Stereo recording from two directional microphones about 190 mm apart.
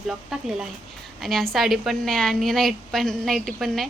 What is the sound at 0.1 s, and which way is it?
A woman's voice, 5° right (ahead or behind).